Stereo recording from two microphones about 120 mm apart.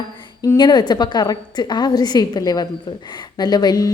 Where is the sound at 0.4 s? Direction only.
35° left (ahead or behind).